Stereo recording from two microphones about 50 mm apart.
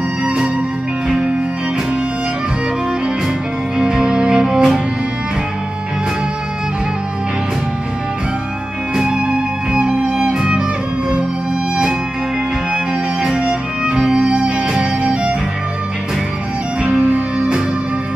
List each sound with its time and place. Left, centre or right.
0.2 s music: centre
3.7 s music: centre
8.9 s music: centre
12.7 s music: centre
17.0 s music: right